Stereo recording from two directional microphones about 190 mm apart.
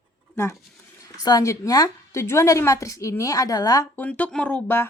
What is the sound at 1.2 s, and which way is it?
A woman's voice, 20° left (ahead or behind).